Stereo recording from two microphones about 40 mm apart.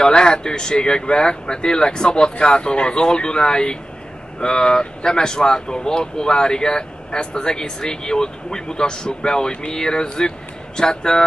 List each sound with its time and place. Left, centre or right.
0.0 s speech: left